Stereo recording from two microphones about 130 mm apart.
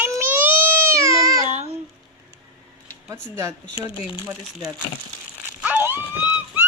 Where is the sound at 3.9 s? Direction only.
40° left (ahead or behind).